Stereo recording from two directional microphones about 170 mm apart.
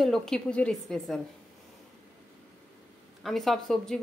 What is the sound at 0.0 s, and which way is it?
Speech, 5° left (ahead or behind).